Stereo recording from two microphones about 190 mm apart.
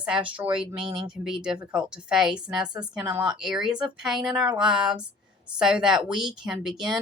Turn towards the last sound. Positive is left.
turn(degrees=0)  # may be behind; listen again after turning